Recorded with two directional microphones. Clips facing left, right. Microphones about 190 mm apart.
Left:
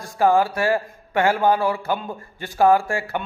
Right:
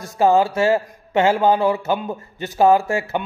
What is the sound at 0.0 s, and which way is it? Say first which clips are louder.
Speech: right 2 dB; 20° right (ahead or behind).